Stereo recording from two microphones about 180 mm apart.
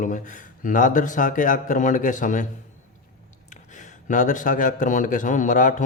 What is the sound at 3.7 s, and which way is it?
Speech, 45° left (ahead or behind).